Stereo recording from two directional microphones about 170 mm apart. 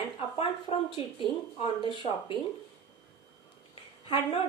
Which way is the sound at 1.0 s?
30° left (ahead or behind).